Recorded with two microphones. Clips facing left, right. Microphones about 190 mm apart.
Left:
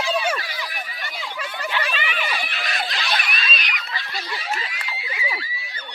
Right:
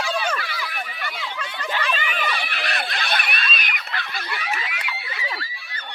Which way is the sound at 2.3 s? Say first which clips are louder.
Even; 65° right (ahead or behind).